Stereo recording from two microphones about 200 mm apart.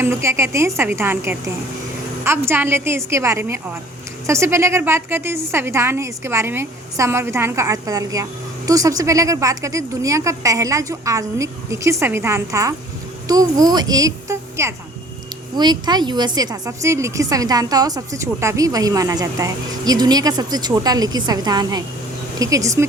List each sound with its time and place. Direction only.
0.0 s a woman's voice: 15° right (ahead or behind)